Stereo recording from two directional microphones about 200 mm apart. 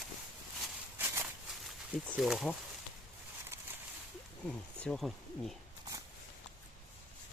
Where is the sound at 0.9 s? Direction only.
10° right (ahead or behind).